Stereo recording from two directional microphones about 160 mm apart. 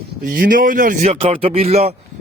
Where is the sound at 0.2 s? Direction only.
60° right (ahead or behind).